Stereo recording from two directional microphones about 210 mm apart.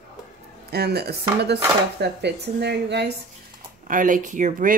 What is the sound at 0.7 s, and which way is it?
Speech, 50° right (ahead or behind).